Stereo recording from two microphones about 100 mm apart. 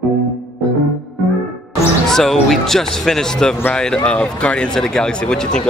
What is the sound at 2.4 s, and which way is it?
Speech, 5° left (ahead or behind).